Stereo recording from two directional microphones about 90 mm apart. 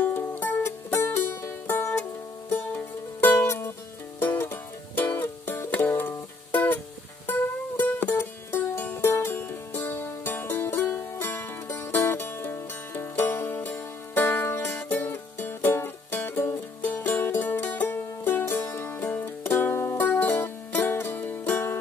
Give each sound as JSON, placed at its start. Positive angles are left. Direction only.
{"t": 0.0, "sound": "music", "side_deg": 20}